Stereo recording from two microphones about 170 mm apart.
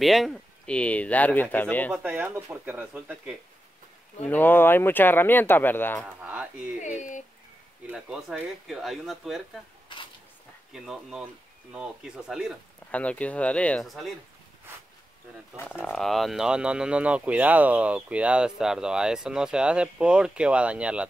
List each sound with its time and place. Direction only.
0.0 s speech: centre (ahead or behind)
1.9 s speech: 10° right (ahead or behind)
4.3 s speech: 10° left (ahead or behind)
6.0 s speech: 10° right (ahead or behind)
7.0 s speech: 45° left (ahead or behind)
7.8 s speech: 5° right (ahead or behind)
10.7 s speech: 5° right (ahead or behind)
15.8 s speech: centre (ahead or behind)